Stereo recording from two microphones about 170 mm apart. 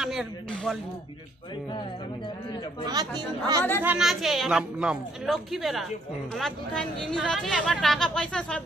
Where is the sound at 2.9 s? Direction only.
25° right (ahead or behind).